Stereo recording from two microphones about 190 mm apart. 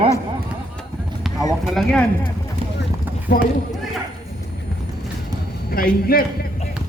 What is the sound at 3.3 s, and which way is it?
Speech, 60° left (ahead or behind).